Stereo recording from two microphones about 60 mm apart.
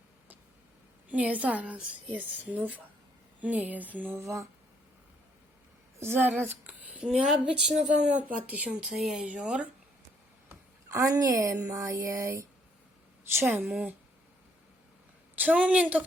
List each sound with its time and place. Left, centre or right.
1.0 s a woman's voice: right
4.2 s music: right
6.0 s speech: right
7.0 s speech: centre
7.9 s a woman's voice: right
9.2 s a woman's voice: right
10.8 s a woman's voice: right
11.6 s music: right
15.4 s a woman's voice: right